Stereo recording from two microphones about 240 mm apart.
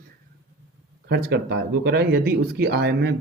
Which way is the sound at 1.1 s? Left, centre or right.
Right.